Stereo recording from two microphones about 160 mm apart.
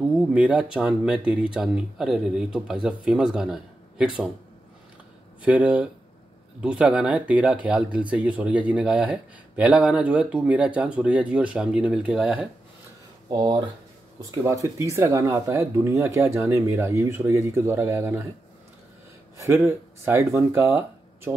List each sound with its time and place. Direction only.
0.3 s speech: 5° right (ahead or behind)
5.4 s speech: 10° right (ahead or behind)
13.3 s speech: 25° right (ahead or behind)
19.3 s speech: 15° right (ahead or behind)